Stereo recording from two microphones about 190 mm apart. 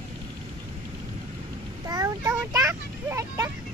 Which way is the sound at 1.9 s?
20° right (ahead or behind).